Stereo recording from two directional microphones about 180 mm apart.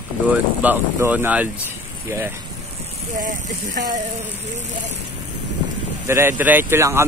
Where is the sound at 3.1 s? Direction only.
45° right (ahead or behind).